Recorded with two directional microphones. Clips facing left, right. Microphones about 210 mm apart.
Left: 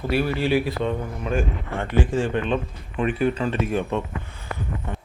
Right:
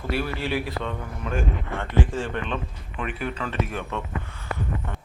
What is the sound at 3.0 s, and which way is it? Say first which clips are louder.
Speech: left 8 dB; 25° left (ahead or behind).